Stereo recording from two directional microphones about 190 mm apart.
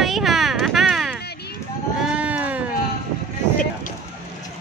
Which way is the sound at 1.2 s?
60° left (ahead or behind).